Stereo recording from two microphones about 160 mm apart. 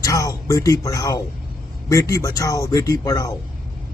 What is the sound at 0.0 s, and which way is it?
Speech, 20° left (ahead or behind).